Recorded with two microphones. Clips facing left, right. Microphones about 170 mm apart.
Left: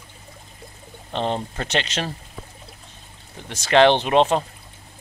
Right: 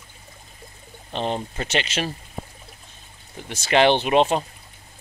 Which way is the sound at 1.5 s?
5° right (ahead or behind).